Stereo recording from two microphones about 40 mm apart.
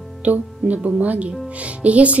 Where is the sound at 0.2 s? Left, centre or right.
Right.